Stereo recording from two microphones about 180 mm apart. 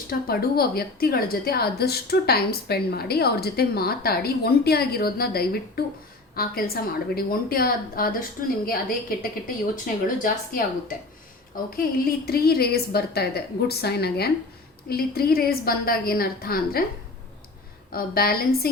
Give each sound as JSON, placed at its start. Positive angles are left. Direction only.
{"t": 0.1, "sound": "a woman's voice", "side_deg": 55}
{"t": 17.9, "sound": "a woman's voice", "side_deg": 55}